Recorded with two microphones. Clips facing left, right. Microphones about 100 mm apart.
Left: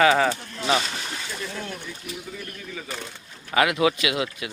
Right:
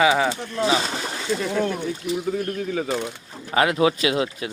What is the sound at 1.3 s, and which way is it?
Speech, 80° right.